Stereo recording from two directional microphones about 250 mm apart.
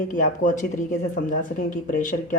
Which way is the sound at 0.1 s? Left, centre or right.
Left.